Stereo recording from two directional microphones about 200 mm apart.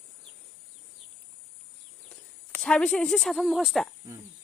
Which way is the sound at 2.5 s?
5° left (ahead or behind).